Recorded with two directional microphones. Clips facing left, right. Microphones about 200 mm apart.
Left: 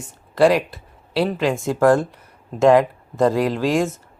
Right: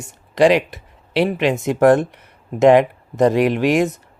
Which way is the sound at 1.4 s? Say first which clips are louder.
Right 3 dB; 20° right (ahead or behind).